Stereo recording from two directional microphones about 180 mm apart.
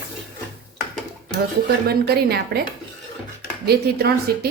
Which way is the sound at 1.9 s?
60° right (ahead or behind).